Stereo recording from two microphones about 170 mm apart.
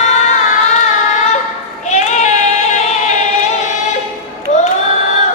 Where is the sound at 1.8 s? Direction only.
45° left (ahead or behind).